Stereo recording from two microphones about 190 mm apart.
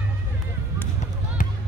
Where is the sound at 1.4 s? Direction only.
45° left (ahead or behind).